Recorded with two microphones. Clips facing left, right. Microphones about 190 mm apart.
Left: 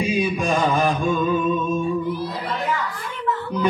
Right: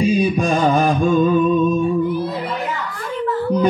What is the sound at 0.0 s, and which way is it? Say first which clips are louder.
Music: right 5 dB; 35° right (ahead or behind).